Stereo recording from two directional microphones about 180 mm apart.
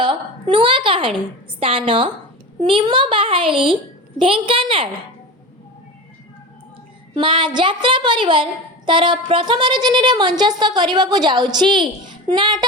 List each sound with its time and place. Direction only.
0.0 s a sound: 25° right (ahead or behind)
1.5 s speech: 30° right (ahead or behind)
7.1 s speech: 25° right (ahead or behind)